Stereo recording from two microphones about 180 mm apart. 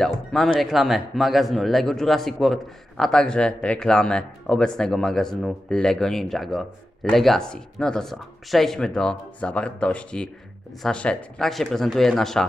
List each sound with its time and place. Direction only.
0.0 s speech: centre (ahead or behind)